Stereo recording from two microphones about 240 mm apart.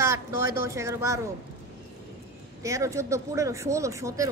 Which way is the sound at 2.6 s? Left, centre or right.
Centre.